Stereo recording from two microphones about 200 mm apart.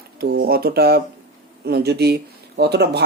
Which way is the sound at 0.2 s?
50° right (ahead or behind).